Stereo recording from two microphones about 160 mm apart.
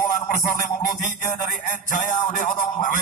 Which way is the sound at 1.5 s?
55° left (ahead or behind).